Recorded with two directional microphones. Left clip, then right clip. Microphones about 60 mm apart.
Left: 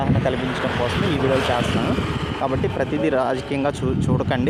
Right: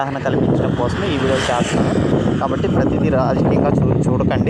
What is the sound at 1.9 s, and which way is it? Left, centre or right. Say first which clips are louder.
Speech: right 7 dB; right.